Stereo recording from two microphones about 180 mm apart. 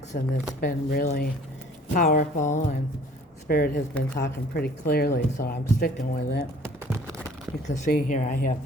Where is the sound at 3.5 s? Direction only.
60° left (ahead or behind).